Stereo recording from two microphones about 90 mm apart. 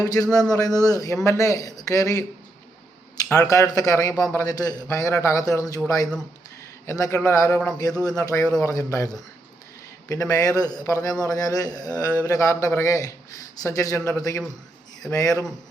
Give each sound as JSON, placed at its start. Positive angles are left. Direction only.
{"t": 0.0, "sound": "a man's voice", "side_deg": 45}
{"t": 3.3, "sound": "a man's voice", "side_deg": 40}
{"t": 6.8, "sound": "a man's voice", "side_deg": 35}